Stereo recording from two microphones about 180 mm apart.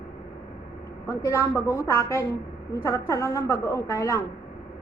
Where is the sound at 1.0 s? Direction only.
15° left (ahead or behind).